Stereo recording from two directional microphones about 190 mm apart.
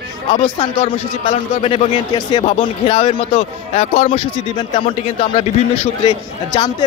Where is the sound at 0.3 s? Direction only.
30° left (ahead or behind).